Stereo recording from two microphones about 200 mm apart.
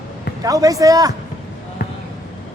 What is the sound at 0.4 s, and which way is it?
Speech, 15° right (ahead or behind).